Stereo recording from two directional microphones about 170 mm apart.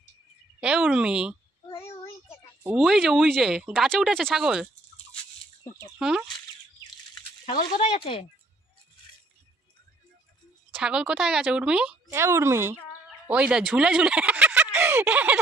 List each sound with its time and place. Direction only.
0.6 s speech: 5° right (ahead or behind)
2.6 s speech: 5° right (ahead or behind)
6.0 s speech: 5° right (ahead or behind)
7.6 s speech: 35° left (ahead or behind)
10.8 s speech: 5° right (ahead or behind)
12.1 s speech: 15° right (ahead or behind)